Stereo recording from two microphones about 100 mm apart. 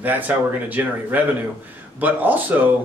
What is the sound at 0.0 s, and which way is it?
Speech, 15° right (ahead or behind).